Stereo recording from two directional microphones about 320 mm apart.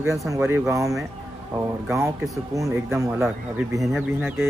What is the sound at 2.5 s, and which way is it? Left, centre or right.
Speech, centre.